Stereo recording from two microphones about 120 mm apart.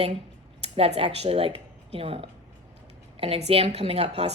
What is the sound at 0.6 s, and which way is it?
Speech, 55° right (ahead or behind).